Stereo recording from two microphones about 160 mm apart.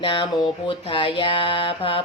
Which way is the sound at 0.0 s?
35° left (ahead or behind).